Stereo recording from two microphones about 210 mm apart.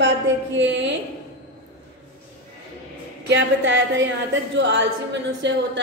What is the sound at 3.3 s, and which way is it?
A woman's voice, 60° right (ahead or behind).